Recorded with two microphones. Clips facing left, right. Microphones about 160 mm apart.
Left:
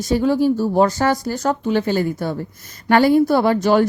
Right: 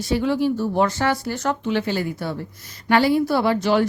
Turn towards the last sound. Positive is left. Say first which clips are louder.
# left 4 dB
turn(degrees=45)  # may be behind; listen again after turning